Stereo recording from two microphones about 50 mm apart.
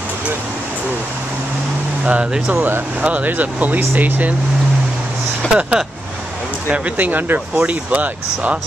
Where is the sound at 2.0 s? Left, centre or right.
Right.